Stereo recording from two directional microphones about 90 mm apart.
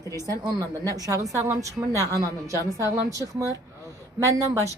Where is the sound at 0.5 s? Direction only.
40° right (ahead or behind).